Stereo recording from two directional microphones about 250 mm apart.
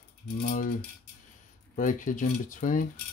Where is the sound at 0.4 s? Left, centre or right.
Left.